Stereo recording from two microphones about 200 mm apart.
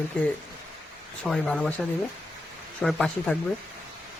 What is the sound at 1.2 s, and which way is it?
Speech, 5° left (ahead or behind).